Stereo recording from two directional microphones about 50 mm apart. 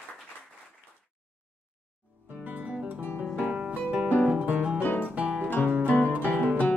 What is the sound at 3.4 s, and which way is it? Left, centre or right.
Music, right.